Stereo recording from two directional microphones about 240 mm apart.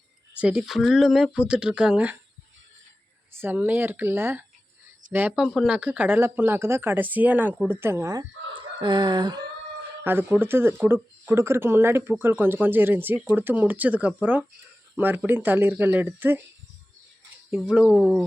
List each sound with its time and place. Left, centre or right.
0.3 s speech: centre
3.4 s speech: centre
17.5 s speech: centre